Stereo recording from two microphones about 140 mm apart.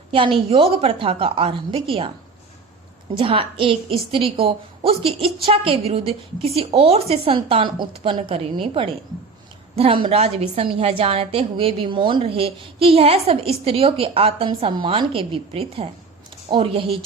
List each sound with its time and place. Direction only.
0.5 s a woman's voice: 40° right (ahead or behind)
3.2 s a woman's voice: 40° right (ahead or behind)